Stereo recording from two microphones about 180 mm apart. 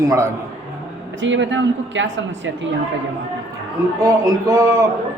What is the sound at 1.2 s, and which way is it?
A woman's voice, 90° right.